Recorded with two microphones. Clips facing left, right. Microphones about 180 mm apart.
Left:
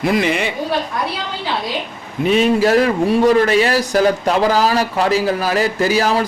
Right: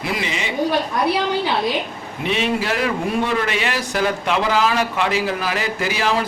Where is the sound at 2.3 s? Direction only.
40° left (ahead or behind).